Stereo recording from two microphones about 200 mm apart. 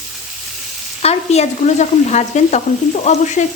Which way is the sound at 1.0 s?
30° left (ahead or behind).